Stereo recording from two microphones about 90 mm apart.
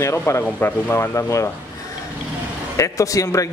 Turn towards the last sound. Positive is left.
turn(degrees=40)  # may be behind; listen again after turning